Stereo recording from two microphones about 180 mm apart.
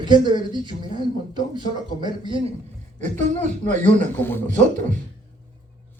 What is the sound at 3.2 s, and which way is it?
Speech, 45° right (ahead or behind).